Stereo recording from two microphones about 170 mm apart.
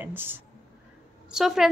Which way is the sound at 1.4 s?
Centre (ahead or behind).